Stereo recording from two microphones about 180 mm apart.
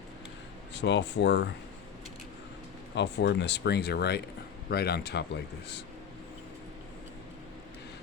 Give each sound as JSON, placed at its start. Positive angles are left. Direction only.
{"t": 0.7, "sound": "speech", "side_deg": 75}
{"t": 2.9, "sound": "speech", "side_deg": 70}